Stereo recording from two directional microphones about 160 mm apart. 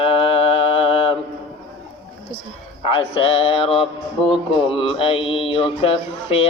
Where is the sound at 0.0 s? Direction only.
35° left (ahead or behind).